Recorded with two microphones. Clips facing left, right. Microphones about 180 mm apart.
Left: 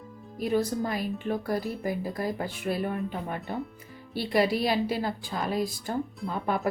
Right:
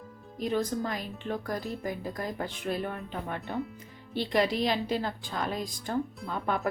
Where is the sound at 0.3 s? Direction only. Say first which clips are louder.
Left 3 dB; 10° left (ahead or behind).